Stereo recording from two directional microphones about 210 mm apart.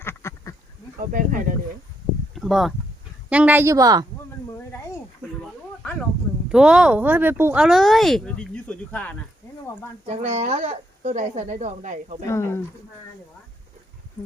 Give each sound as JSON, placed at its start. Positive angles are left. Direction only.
{"t": 0.0, "sound": "duck", "side_deg": 10}
{"t": 0.9, "sound": "speech", "side_deg": -40}
{"t": 2.3, "sound": "speech", "side_deg": 0}
{"t": 5.8, "sound": "a sound", "side_deg": 5}
{"t": 6.5, "sound": "speech", "side_deg": -5}
{"t": 10.1, "sound": "speech", "side_deg": -30}
{"t": 12.3, "sound": "speech", "side_deg": 10}